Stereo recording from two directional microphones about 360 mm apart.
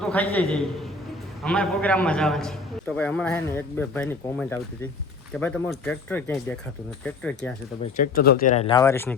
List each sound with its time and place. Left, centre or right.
0.0 s a man's voice: centre
7.9 s speech: left; by 9.1 s centre